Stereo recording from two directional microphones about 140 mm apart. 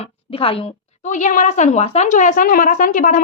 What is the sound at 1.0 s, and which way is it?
A woman's voice, 65° left (ahead or behind).